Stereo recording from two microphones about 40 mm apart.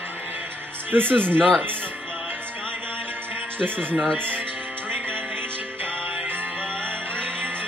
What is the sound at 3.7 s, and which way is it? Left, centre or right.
Speech, left.